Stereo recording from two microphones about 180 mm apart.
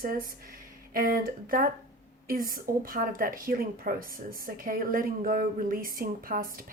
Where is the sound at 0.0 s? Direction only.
55° right (ahead or behind).